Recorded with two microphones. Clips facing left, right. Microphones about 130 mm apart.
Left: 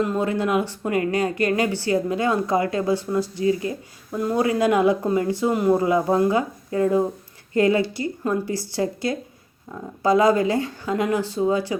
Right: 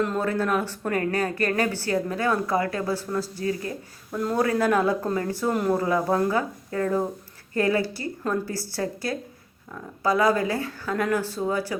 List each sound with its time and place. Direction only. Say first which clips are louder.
0.0 s speech: left 2 dB; 10° left (ahead or behind)